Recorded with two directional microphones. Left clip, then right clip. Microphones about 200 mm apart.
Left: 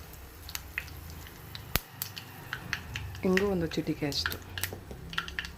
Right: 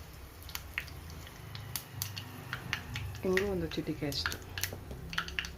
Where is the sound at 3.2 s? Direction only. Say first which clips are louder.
Left 4 dB; 25° left (ahead or behind).